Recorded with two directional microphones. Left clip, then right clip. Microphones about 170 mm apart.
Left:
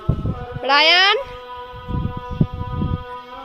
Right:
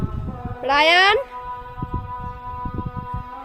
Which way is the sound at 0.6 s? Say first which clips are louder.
Left 1 dB; centre (ahead or behind).